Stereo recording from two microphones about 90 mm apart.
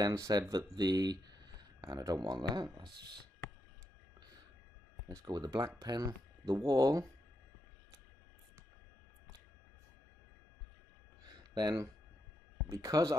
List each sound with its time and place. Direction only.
0.0 s speech: 45° right (ahead or behind)
5.0 s speech: 45° right (ahead or behind)
6.7 s speech: 40° right (ahead or behind)
11.2 s a sound: 50° right (ahead or behind)
12.6 s speech: 40° right (ahead or behind)